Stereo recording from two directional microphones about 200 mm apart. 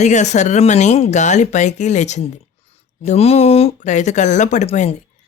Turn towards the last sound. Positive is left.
turn(degrees=35)  # may be behind; listen again after turning